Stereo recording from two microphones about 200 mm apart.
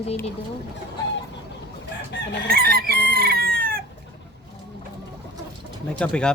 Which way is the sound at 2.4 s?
50° right (ahead or behind).